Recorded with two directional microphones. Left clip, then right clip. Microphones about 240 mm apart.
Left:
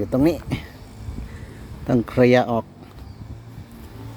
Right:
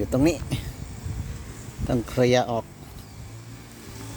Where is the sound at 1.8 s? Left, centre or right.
Centre.